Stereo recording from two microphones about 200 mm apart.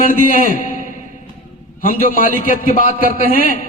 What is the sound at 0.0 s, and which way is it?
Speech, 45° left (ahead or behind).